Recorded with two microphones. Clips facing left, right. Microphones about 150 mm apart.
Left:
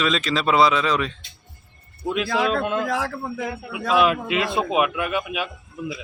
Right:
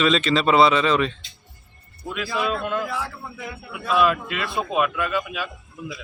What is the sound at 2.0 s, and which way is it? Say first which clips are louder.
Speech: left 6 dB; 25° left (ahead or behind).